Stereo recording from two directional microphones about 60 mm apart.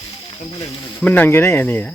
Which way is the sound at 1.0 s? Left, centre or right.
Left.